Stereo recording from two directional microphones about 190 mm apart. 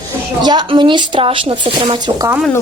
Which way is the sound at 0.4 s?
25° right (ahead or behind).